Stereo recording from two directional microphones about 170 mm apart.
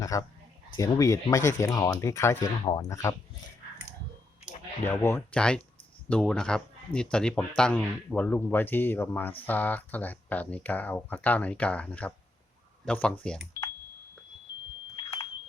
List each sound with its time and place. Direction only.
0.0 s speech: 20° left (ahead or behind)
4.9 s speech: 15° left (ahead or behind)